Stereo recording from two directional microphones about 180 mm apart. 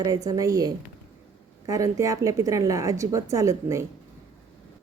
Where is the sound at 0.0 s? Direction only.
20° right (ahead or behind).